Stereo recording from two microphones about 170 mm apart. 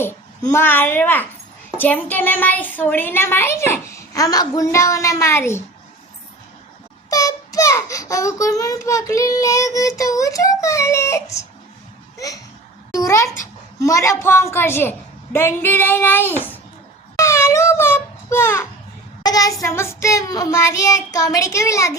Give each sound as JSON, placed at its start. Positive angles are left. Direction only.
{"t": 0.0, "sound": "a child's voice", "side_deg": 15}
{"t": 7.1, "sound": "a child's voice", "side_deg": 20}
{"t": 17.2, "sound": "a sound", "side_deg": 15}
{"t": 19.2, "sound": "a child's voice", "side_deg": 20}